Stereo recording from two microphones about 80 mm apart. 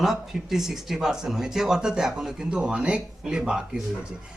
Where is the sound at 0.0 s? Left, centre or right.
Centre.